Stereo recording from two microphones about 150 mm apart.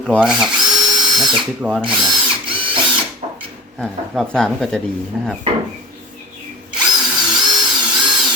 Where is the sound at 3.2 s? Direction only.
45° right (ahead or behind).